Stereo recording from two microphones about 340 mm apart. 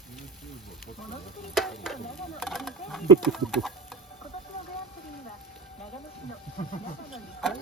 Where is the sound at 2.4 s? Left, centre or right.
Centre.